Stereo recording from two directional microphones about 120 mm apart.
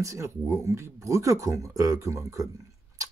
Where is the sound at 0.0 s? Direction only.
25° right (ahead or behind).